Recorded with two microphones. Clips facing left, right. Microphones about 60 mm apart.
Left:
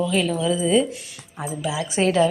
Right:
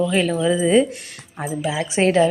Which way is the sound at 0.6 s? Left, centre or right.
Right.